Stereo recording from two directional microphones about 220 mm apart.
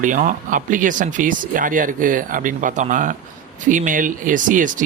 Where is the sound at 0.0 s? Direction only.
35° right (ahead or behind).